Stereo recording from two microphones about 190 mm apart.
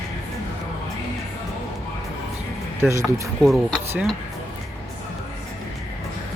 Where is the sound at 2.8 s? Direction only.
15° right (ahead or behind).